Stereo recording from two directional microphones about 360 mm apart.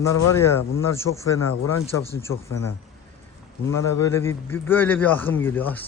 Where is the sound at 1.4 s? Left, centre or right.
Left.